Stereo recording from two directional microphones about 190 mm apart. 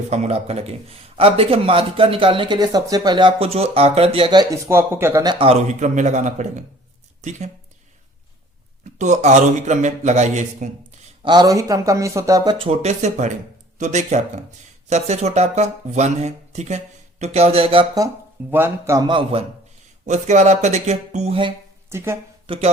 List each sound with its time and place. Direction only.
0.1 s speech: 35° right (ahead or behind)
4.8 s speech: 10° right (ahead or behind); by 7.5 s 35° right (ahead or behind)
8.8 s speech: 40° right (ahead or behind)
11.2 s speech: 20° right (ahead or behind)
12.5 s speech: 30° right (ahead or behind)
18.5 s speech: 15° right (ahead or behind); by 21.5 s 30° right (ahead or behind)
21.8 s speech: 15° right (ahead or behind)
22.4 s speech: 30° right (ahead or behind)